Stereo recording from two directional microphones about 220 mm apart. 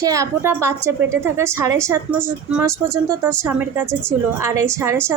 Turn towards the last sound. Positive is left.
turn(degrees=-10)  # may be behind; listen again after turning